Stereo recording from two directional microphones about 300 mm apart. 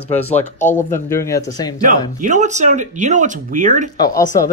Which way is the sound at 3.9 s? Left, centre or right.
Centre.